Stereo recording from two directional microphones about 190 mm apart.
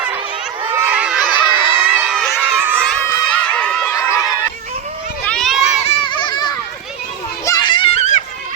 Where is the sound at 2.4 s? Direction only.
10° right (ahead or behind).